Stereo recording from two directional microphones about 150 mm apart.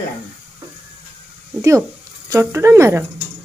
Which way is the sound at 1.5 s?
20° right (ahead or behind).